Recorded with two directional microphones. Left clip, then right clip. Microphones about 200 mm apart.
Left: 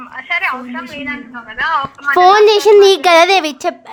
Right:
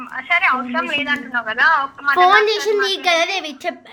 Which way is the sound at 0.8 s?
55° right (ahead or behind).